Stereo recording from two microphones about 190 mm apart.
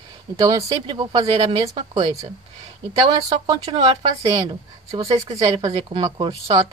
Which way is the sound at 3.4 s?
30° right (ahead or behind).